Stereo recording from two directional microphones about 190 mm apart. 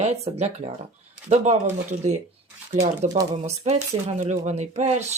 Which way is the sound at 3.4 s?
35° right (ahead or behind).